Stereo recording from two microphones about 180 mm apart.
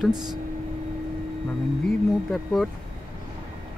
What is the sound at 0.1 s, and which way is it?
Speech, 25° right (ahead or behind).